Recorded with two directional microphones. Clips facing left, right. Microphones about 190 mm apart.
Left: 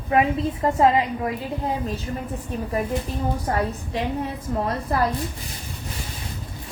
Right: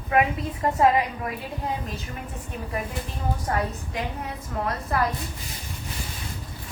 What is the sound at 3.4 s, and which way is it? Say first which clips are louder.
A woman's voice: left 3 dB; 30° left (ahead or behind).